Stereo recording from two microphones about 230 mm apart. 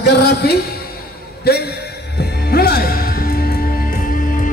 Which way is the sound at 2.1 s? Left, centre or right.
Left.